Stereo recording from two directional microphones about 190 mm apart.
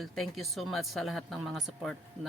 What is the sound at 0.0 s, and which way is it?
Speech, centre (ahead or behind).